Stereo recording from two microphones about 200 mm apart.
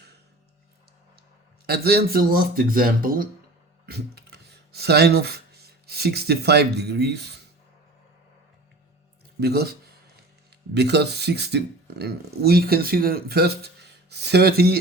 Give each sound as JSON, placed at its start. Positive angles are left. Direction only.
{"t": 1.6, "sound": "speech", "side_deg": -50}
{"t": 9.4, "sound": "speech", "side_deg": -55}